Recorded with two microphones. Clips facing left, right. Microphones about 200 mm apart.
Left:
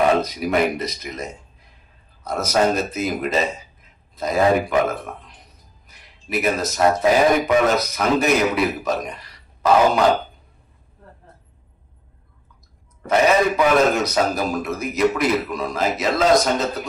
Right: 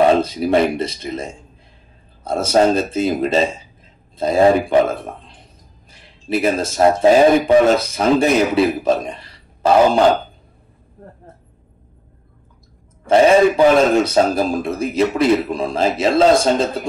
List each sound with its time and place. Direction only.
0.0 s speech: 30° right (ahead or behind)
11.0 s a sound: 50° right (ahead or behind)
13.0 s a man's voice: 30° right (ahead or behind)